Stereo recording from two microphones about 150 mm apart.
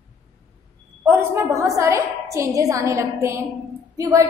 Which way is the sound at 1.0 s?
15° right (ahead or behind).